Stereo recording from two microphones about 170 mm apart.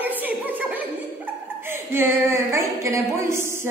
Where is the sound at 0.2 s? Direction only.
10° right (ahead or behind).